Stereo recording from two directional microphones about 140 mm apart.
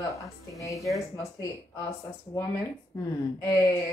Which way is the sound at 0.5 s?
25° left (ahead or behind).